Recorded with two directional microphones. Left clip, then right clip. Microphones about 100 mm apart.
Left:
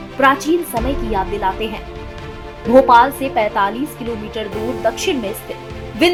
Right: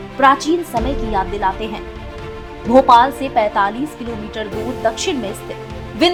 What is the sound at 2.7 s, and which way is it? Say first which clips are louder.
A woman's voice: even; 60° right (ahead or behind).